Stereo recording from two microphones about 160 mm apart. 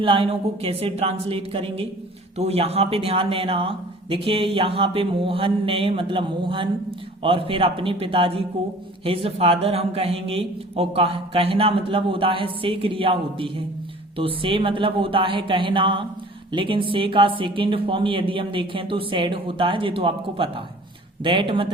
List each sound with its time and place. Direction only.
0.0 s a man's voice: 35° right (ahead or behind)